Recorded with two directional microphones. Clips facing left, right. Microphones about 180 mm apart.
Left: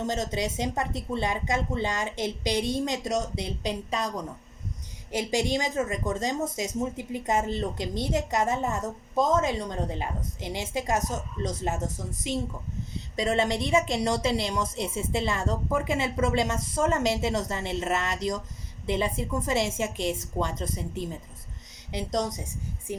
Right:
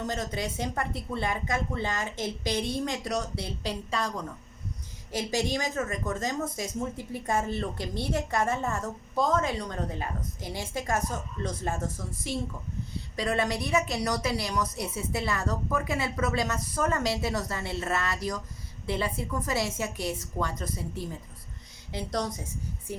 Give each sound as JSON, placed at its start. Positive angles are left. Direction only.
{"t": 0.0, "sound": "a woman's voice", "side_deg": 20}